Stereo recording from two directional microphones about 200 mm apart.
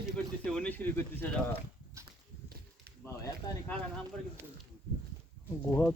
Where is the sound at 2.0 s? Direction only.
50° right (ahead or behind).